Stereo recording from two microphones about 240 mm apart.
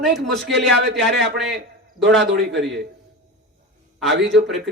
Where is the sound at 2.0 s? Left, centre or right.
Right.